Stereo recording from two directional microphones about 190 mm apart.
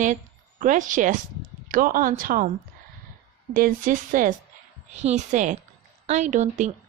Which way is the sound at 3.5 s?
45° right (ahead or behind).